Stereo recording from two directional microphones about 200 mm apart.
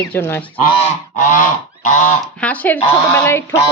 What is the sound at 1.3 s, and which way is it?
Goose, 40° left (ahead or behind).